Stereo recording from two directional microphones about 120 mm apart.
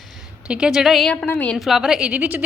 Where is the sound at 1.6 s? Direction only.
Centre (ahead or behind).